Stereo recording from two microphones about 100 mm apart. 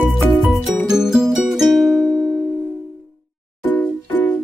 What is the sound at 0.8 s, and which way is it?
Music, 5° right (ahead or behind).